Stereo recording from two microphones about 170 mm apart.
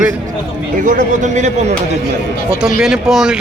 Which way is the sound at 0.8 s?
45° right (ahead or behind).